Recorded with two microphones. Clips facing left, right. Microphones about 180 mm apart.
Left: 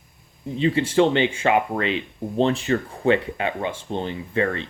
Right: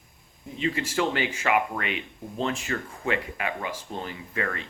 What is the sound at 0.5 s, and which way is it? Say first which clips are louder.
Speech: left 8 dB; 30° left (ahead or behind).